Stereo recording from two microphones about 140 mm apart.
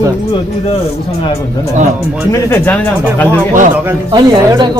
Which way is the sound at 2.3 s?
15° left (ahead or behind).